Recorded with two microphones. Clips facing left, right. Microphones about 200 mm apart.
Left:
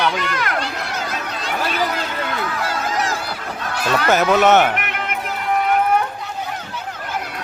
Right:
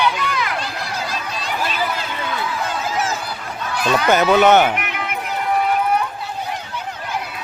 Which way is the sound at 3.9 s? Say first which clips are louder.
Right 1 dB; centre (ahead or behind).